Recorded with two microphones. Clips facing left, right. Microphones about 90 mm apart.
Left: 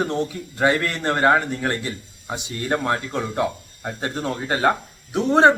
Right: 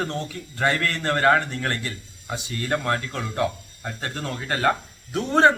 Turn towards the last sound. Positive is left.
turn(degrees=20)  # may be behind; listen again after turning